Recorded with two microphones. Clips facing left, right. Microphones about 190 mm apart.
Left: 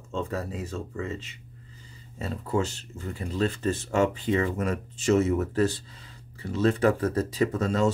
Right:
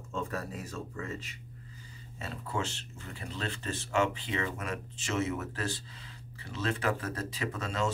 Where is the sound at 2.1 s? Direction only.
40° left (ahead or behind).